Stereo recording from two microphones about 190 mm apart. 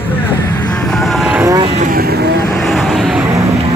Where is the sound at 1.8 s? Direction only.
50° right (ahead or behind).